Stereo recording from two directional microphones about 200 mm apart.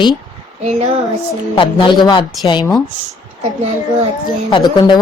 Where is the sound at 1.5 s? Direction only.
25° left (ahead or behind).